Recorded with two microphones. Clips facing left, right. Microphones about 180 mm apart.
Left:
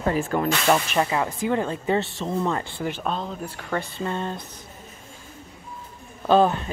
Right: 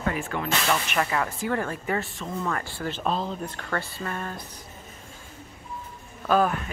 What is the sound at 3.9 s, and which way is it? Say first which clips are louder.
Speech: left 5 dB; 20° left (ahead or behind).